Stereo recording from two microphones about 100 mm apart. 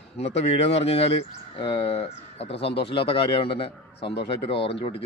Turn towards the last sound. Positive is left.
turn(degrees=65)  # may be behind; listen again after turning